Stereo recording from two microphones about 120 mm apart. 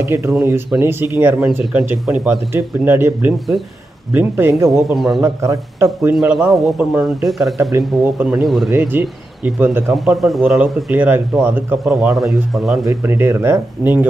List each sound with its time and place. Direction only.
0.1 s speech: 20° right (ahead or behind)
1.6 s speech: 5° right (ahead or behind); by 4.6 s 20° right (ahead or behind)
4.6 s speech: centre (ahead or behind)
5.2 s speech: 25° right (ahead or behind)
6.1 s speech: centre (ahead or behind)
7.7 s speech: 15° right (ahead or behind)
8.4 s speech: centre (ahead or behind)
8.7 s speech: 20° right (ahead or behind)
9.9 s speech: centre (ahead or behind)
10.6 s speech: 15° right (ahead or behind)
11.8 s speech: 5° right (ahead or behind)
12.8 s speech: 20° right (ahead or behind)